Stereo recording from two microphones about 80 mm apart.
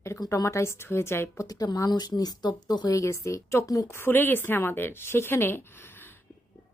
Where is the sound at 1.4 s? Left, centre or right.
Left.